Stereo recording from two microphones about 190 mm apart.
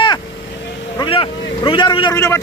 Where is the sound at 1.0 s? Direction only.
25° left (ahead or behind).